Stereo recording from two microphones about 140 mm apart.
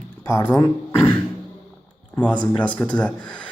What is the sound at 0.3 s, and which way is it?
Speech, 25° left (ahead or behind).